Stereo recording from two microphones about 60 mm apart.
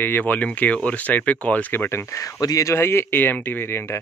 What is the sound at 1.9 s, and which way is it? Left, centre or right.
Speech, left.